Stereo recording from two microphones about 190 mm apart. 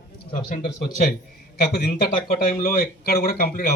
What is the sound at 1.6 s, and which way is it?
Speech, 55° left (ahead or behind).